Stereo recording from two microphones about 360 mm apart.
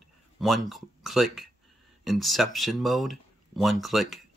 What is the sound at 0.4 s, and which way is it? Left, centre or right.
Speech, centre.